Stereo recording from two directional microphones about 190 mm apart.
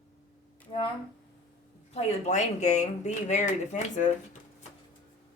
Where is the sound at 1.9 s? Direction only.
35° left (ahead or behind).